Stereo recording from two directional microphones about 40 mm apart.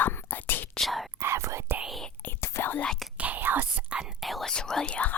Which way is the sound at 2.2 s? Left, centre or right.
Left.